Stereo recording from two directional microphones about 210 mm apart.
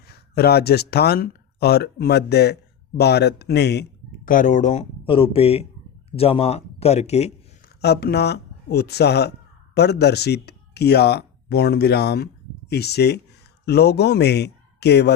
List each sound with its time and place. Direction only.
0.1 s speech: 50° left (ahead or behind)
4.3 s speech: 40° left (ahead or behind)
7.8 s speech: 50° left (ahead or behind)